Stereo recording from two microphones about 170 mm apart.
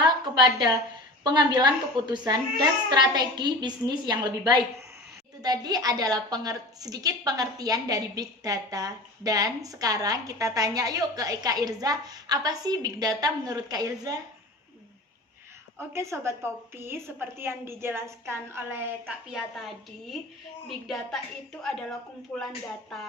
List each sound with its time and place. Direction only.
0.0 s a sound: 25° right (ahead or behind)
1.2 s a woman's voice: 25° right (ahead or behind)
15.9 s a woman's voice: 15° right (ahead or behind)
19.3 s a woman's voice: centre (ahead or behind)